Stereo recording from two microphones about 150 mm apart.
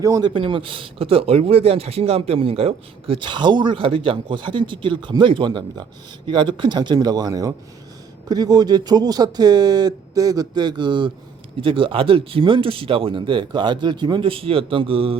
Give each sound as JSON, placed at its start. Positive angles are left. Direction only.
{"t": 0.0, "sound": "speech", "side_deg": -20}
{"t": 0.3, "sound": "speech", "side_deg": -35}